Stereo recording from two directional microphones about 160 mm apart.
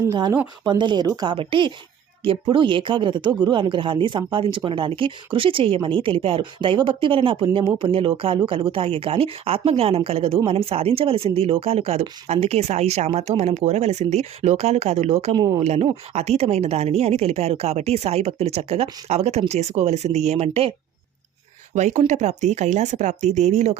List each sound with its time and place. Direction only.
0.0 s speech: 25° right (ahead or behind); by 15.4 s 40° right (ahead or behind)
15.4 s speech: 20° right (ahead or behind)
15.6 s speech: 40° right (ahead or behind)
21.8 s speech: 45° right (ahead or behind)